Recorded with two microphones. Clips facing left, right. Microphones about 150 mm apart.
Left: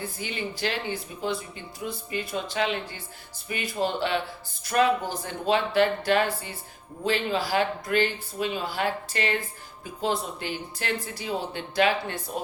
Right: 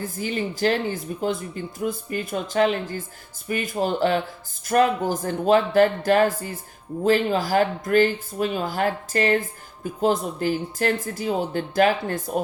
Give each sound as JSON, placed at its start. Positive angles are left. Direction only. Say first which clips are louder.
{"t": 0.0, "sound": "speech", "louder": "right 6 dB", "side_deg": -40}